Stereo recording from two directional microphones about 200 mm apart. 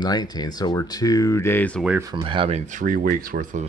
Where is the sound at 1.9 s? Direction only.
15° right (ahead or behind); by 3.6 s 45° right (ahead or behind).